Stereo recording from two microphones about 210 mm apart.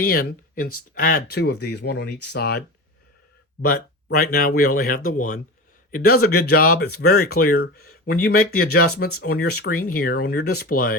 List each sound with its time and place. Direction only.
0.0 s speech: 45° left (ahead or behind)